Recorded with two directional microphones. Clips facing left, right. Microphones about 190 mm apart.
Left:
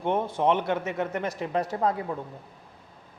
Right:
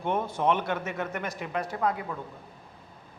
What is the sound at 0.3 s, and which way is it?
A man's voice, 20° left (ahead or behind).